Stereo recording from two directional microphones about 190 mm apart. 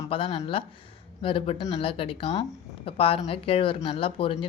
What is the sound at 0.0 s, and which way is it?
Speech, 30° left (ahead or behind).